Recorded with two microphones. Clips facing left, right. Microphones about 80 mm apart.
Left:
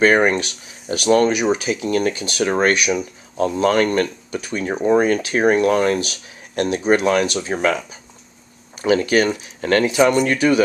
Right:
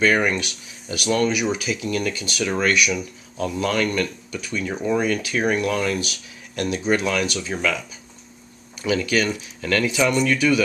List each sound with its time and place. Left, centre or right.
0.0 s speech: left
8.8 s speech: left